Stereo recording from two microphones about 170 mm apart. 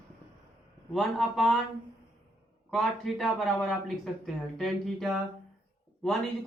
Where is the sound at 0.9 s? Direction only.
Centre (ahead or behind).